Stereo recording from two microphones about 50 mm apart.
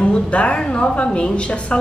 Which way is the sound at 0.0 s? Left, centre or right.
Left.